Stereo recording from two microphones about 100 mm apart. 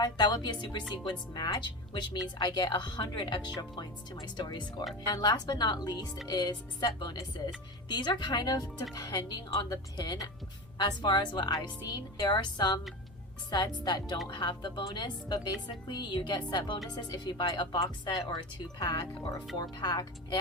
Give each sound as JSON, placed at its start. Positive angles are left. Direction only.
{"t": 0.0, "sound": "speech", "side_deg": 45}